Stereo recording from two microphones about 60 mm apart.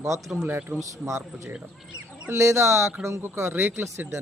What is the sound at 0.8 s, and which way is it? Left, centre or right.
Speech, right.